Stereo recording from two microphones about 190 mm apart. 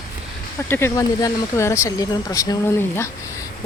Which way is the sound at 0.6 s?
10° left (ahead or behind).